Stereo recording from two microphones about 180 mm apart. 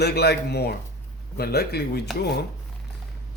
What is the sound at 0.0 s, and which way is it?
Speech, 65° left (ahead or behind).